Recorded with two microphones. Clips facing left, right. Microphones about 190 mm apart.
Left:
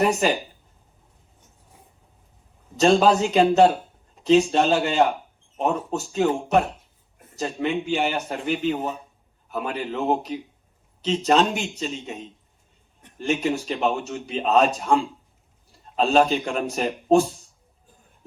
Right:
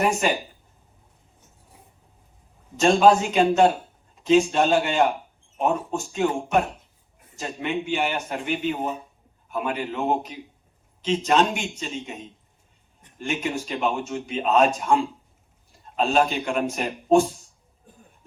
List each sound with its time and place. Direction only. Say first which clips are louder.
2.7 s a man's voice: even; 35° left (ahead or behind)
16.0 s a man's voice: left 3 dB; 35° left (ahead or behind)